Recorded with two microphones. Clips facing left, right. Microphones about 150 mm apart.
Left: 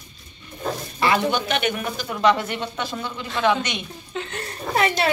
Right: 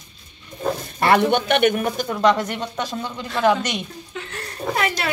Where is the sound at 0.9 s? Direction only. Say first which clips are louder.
Right 4 dB; 60° right (ahead or behind); by 3.8 s 40° right (ahead or behind).